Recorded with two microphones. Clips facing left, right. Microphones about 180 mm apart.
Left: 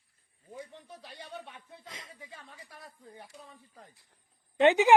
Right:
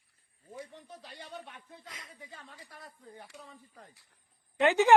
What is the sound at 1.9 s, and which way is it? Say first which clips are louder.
Speech: left 3 dB; 25° left (ahead or behind).